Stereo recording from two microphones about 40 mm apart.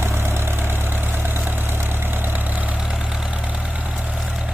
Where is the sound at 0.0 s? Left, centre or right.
Right.